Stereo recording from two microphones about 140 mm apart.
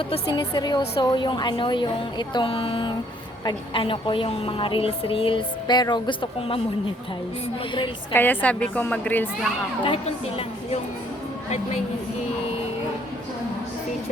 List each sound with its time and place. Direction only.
0.1 s a woman's voice: 30° left (ahead or behind)
8.1 s a woman's voice: 15° left (ahead or behind)
9.8 s speech: 45° left (ahead or behind)